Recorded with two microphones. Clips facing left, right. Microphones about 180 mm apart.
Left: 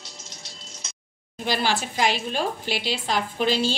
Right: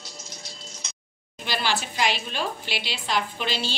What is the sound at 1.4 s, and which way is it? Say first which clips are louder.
A woman's voice: left 3 dB; 45° left (ahead or behind).